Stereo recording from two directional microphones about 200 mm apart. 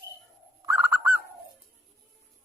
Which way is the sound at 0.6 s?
10° right (ahead or behind).